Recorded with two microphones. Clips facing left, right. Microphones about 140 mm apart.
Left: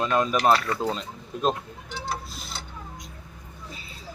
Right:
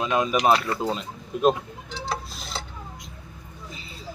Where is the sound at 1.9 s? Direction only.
90° right.